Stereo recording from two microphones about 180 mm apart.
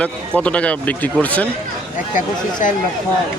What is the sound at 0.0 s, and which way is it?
Speech, 5° left (ahead or behind).